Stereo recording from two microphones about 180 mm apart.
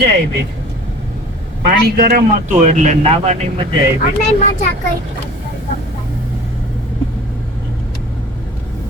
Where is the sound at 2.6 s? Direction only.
40° right (ahead or behind).